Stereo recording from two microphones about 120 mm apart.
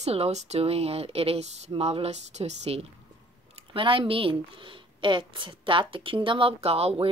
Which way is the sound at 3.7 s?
45° right (ahead or behind).